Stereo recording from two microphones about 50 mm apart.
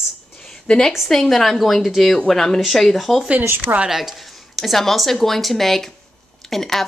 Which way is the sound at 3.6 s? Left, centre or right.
Right.